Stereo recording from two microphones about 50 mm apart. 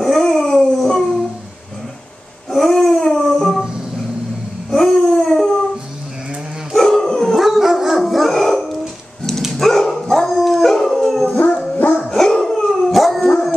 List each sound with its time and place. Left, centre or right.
0.0 s dog: centre
2.5 s howl: centre
4.6 s dog: centre
6.7 s dog: centre
7.4 s dog: centre
9.5 s howl: centre
11.7 s dog: left
12.1 s dog: centre